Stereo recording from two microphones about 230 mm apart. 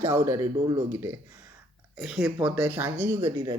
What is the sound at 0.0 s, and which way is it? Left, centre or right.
Speech, centre.